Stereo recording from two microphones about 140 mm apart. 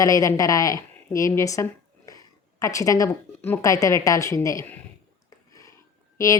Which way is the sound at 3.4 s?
20° left (ahead or behind).